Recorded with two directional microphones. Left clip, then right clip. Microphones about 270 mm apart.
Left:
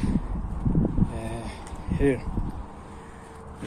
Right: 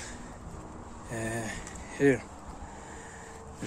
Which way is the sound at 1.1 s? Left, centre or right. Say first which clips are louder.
Right 1 dB; right.